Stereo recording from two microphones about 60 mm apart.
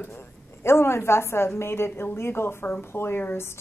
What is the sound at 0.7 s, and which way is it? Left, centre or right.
A woman's voice, left.